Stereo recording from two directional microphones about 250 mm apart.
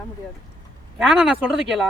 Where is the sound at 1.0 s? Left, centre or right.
Centre.